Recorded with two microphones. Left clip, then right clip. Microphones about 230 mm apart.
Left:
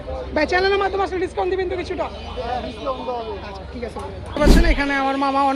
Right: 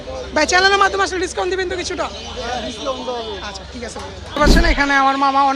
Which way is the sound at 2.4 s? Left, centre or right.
Right.